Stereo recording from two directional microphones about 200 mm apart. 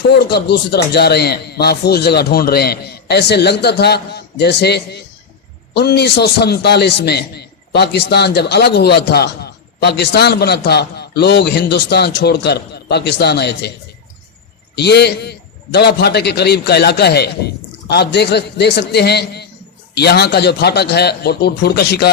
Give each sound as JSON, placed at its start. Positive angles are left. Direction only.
{"t": 0.1, "sound": "a man's voice", "side_deg": 55}
{"t": 14.8, "sound": "a man's voice", "side_deg": 55}